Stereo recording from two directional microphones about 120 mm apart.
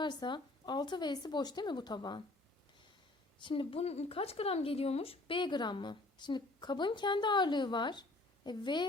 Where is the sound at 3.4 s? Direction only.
45° left (ahead or behind).